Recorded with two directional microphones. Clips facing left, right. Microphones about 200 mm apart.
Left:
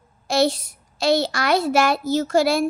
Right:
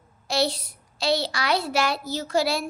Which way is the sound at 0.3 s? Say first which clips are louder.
Left 5 dB; 50° left (ahead or behind).